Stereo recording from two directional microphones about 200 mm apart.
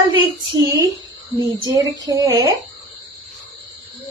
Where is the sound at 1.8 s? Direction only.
15° right (ahead or behind).